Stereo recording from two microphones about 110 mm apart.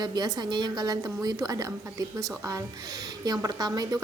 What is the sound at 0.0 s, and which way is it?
A woman's voice, 40° right (ahead or behind).